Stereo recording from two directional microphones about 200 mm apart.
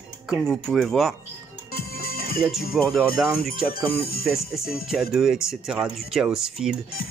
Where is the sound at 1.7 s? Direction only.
50° left (ahead or behind).